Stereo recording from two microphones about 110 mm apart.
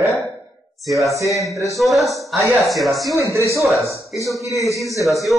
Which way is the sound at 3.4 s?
30° left (ahead or behind).